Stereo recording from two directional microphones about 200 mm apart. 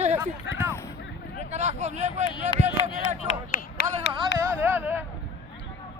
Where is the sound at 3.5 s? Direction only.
50° left (ahead or behind).